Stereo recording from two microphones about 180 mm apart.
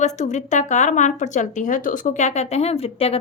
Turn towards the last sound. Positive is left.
turn(degrees=35)  # may be behind; listen again after turning